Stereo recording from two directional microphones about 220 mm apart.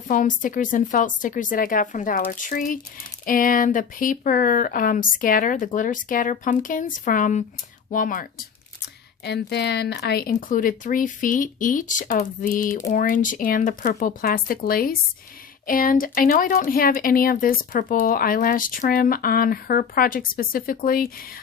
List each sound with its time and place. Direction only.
0.1 s speech: 35° left (ahead or behind)
9.2 s speech: 50° left (ahead or behind)